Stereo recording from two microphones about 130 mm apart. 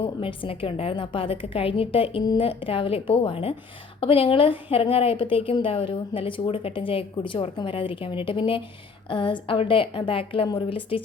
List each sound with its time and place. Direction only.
0.0 s a woman's voice: 40° left (ahead or behind)
2.2 s a woman's voice: 30° left (ahead or behind)
2.5 s a woman's voice: 45° left (ahead or behind)